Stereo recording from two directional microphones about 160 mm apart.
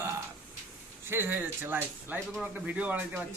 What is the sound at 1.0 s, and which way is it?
Speech, 15° right (ahead or behind).